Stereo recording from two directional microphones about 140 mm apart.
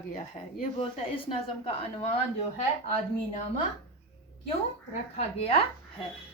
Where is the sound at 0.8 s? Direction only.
40° left (ahead or behind).